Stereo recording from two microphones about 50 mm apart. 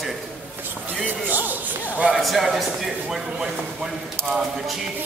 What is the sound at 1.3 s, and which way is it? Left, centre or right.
Speech, right.